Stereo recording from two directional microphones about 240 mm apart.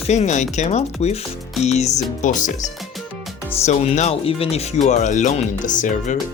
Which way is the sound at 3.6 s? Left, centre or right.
Left.